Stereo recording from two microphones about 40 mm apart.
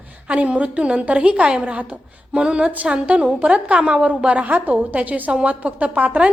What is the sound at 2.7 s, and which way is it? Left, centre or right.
A woman's voice, right.